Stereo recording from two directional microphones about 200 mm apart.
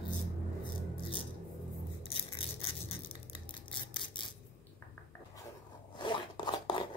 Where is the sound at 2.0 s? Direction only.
30° left (ahead or behind).